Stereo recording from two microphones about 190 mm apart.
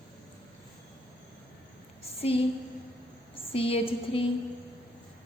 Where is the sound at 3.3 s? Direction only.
30° left (ahead or behind).